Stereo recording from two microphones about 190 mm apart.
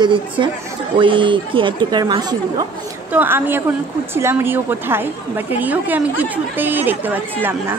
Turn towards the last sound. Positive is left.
turn(degrees=-10)  # may be behind; listen again after turning